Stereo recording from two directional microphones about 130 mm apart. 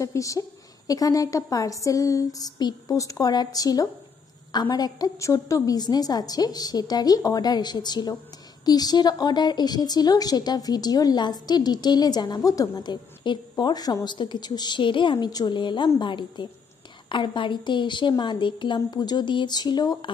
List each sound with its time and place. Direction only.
0.0 s a woman's voice: 25° left (ahead or behind)